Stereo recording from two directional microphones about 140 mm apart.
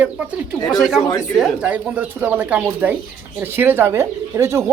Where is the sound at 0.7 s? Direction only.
Centre (ahead or behind).